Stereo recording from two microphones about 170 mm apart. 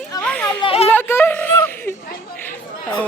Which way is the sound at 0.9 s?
10° left (ahead or behind).